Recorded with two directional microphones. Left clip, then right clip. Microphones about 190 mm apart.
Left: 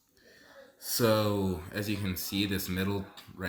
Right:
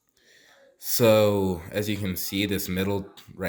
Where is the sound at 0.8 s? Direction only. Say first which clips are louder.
Right 8 dB; 50° right (ahead or behind).